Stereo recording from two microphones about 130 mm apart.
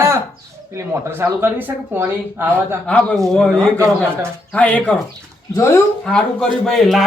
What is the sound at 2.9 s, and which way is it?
Speech, 10° left (ahead or behind).